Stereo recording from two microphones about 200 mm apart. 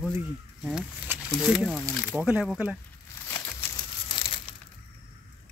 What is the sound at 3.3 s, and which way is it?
Crumpling, 10° left (ahead or behind).